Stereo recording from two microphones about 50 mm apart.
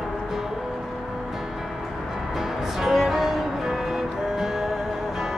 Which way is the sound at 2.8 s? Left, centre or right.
Centre.